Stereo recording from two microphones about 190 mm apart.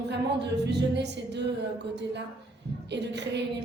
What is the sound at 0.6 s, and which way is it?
Speech, 65° right (ahead or behind).